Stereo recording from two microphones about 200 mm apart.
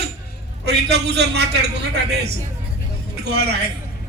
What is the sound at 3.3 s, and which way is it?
Speech, 55° right (ahead or behind).